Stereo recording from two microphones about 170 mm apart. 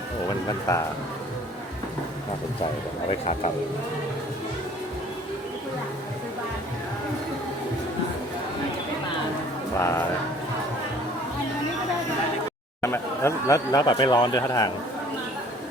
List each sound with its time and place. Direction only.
0.7 s speech: 20° left (ahead or behind)
3.1 s speech: 35° left (ahead or behind)
9.7 s speech: 15° left (ahead or behind)
12.8 s speech: 15° left (ahead or behind)